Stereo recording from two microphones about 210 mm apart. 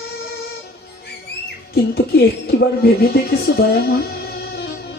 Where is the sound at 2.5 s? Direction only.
45° left (ahead or behind).